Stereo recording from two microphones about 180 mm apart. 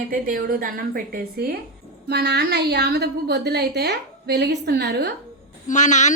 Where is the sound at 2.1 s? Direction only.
65° right (ahead or behind).